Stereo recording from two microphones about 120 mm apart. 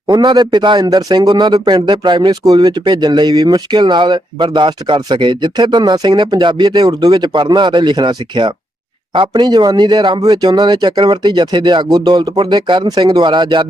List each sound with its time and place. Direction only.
0.1 s a man's voice: 35° right (ahead or behind)